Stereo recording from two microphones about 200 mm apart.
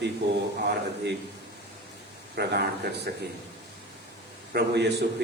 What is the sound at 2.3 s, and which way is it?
Speech, 55° right (ahead or behind).